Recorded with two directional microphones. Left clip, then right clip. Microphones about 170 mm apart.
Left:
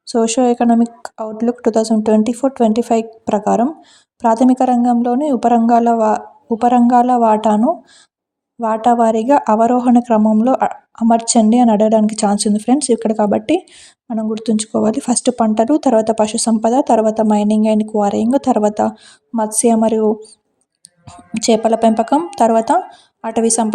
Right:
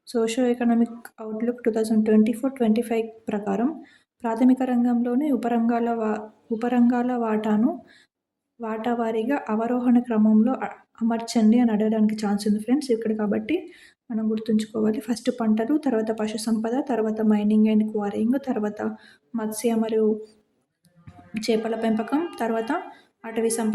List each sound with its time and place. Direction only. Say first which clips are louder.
0.1 s a woman's voice: left 9 dB; 30° left (ahead or behind)
8.6 s a woman's voice: left 14 dB; 35° left (ahead or behind)
21.3 s a woman's voice: left 11 dB; 40° left (ahead or behind)